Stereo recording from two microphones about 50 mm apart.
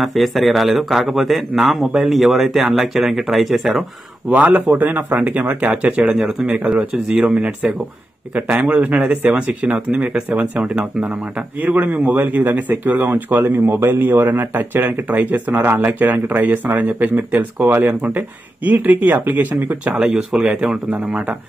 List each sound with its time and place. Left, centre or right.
0.0 s a man's voice: centre
4.6 s speech: right
6.1 s speech: centre
8.4 s speech: right
11.7 s speech: right
15.7 s speech: right
16.1 s speech: right
17.6 s speech: right
18.7 s speech: right
20.0 s speech: centre